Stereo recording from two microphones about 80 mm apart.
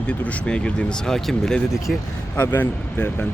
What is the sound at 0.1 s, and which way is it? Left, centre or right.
Speech, centre.